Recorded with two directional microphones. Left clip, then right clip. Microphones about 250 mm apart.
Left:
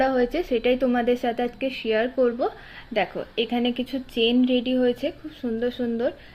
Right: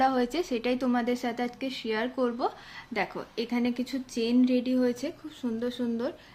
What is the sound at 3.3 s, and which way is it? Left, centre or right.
Speech, right.